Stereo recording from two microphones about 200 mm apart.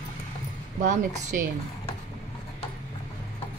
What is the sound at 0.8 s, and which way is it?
Speech, 35° right (ahead or behind).